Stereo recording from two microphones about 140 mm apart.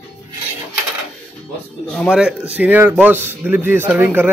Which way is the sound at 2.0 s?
5° right (ahead or behind).